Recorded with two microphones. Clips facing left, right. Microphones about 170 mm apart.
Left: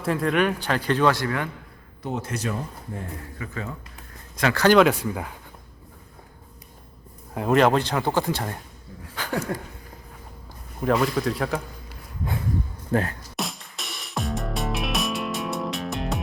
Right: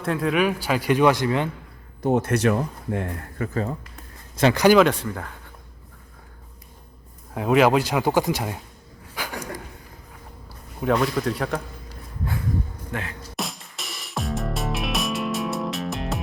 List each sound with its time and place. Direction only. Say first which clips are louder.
0.0 s speech: even; centre (ahead or behind); by 1.5 s 20° right (ahead or behind)
2.0 s speech: right 9 dB; 60° right (ahead or behind)
3.3 s speech: right 8 dB; 40° right (ahead or behind)
4.5 s speech: right 1 dB; 10° right (ahead or behind)
4.8 s speech: even; 5° left (ahead or behind)
7.3 s speech: right 1 dB; 5° right (ahead or behind)
9.1 s a sound: left 4 dB; 10° right (ahead or behind)
10.8 s a man's voice: even; centre (ahead or behind)
12.9 s speech: left 9 dB; 40° left (ahead or behind)
13.3 s music: even; centre (ahead or behind)